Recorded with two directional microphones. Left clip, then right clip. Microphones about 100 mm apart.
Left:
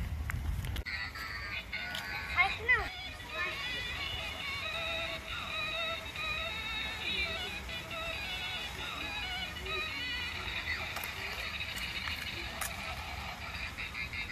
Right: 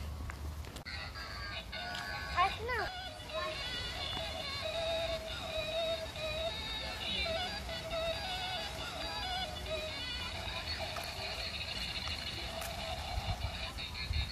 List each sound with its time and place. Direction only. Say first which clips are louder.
2.3 s music: left 4 dB; 25° right (ahead or behind)
3.3 s a sound: left 2 dB; 25° right (ahead or behind)
4.7 s music: right 4 dB; 20° right (ahead or behind)
7.1 s music: right 1 dB; 25° right (ahead or behind)